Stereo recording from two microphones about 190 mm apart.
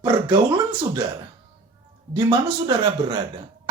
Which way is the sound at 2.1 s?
25° right (ahead or behind).